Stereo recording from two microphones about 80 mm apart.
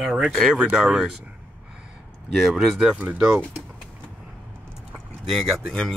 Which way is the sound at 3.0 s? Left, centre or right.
Right.